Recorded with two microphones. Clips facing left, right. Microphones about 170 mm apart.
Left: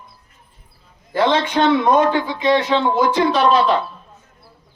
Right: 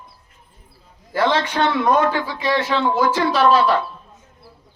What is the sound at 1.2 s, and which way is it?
A man's voice, 20° left (ahead or behind).